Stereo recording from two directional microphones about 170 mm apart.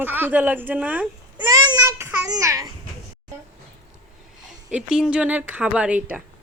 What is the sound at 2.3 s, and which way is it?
Speech, 20° right (ahead or behind).